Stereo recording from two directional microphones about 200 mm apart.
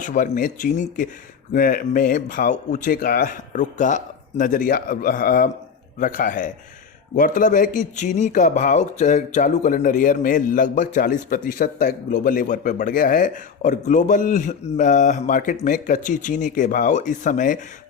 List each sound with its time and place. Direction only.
0.0 s a man's voice: 40° left (ahead or behind)